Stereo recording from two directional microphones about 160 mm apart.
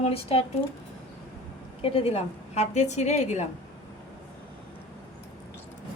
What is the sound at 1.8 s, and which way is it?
A woman's voice, 40° left (ahead or behind).